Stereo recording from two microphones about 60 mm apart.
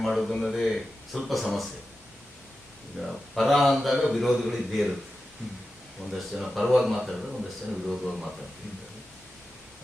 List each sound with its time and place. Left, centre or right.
0.0 s a man's voice: centre
3.0 s a man's voice: centre
6.1 s a man's voice: centre